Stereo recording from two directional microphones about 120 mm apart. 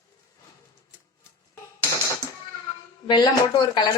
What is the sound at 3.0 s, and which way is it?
Speech, 40° left (ahead or behind).